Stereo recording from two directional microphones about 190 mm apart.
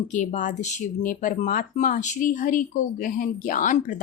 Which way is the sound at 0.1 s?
40° left (ahead or behind).